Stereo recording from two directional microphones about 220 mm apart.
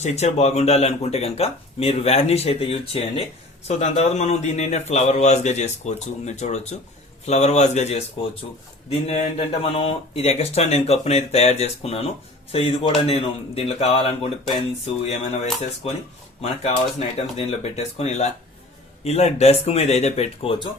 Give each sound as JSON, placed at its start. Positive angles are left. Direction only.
{"t": 0.0, "sound": "a man's voice", "side_deg": 30}
{"t": 17.2, "sound": "speech", "side_deg": 30}